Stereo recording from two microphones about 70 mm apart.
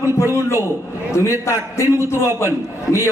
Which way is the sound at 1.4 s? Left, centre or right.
Left.